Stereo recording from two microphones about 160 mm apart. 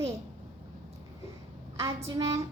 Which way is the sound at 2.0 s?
35° right (ahead or behind).